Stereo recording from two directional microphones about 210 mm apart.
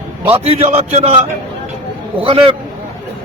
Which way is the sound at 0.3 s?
30° right (ahead or behind).